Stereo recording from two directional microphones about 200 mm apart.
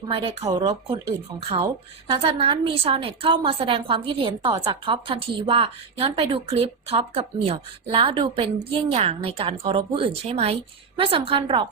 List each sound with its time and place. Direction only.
0.1 s a woman's voice: 30° right (ahead or behind)